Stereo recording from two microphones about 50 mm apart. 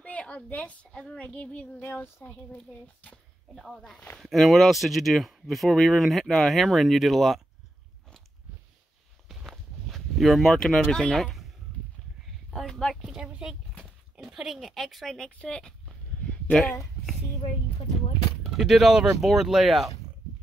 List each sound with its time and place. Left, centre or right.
0.0 s a child's voice: left
3.5 s speech: centre
9.5 s speech: centre
12.5 s speech: centre
13.0 s speech: centre
14.3 s speech: centre
15.3 s speech: centre
18.6 s speech: centre